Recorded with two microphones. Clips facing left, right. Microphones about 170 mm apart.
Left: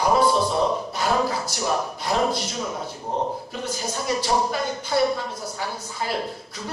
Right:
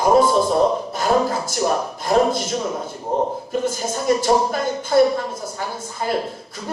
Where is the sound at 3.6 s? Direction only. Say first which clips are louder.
Right 4 dB; 50° right (ahead or behind).